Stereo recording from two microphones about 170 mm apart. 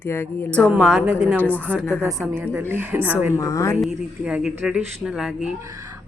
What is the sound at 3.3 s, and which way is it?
Speech, 20° left (ahead or behind).